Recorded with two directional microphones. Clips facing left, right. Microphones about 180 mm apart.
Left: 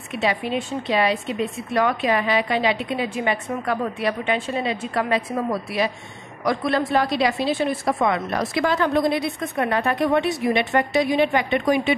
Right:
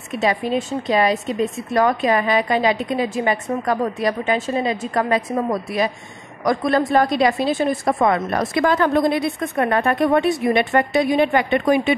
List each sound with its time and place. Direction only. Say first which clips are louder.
0.1 s a woman's voice: right 3 dB; 45° right (ahead or behind)